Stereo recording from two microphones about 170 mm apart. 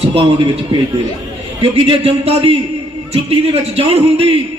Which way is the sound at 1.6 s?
35° right (ahead or behind).